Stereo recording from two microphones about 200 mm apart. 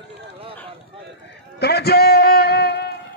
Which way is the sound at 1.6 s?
55° left (ahead or behind).